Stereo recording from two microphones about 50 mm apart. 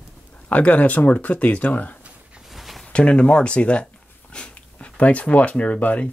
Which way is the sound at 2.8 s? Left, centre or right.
Left.